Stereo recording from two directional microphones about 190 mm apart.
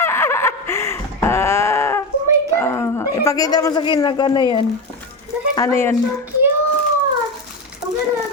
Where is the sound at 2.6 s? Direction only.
15° left (ahead or behind).